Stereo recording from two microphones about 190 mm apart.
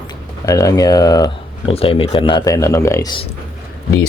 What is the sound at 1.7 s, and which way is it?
Speech, 30° left (ahead or behind).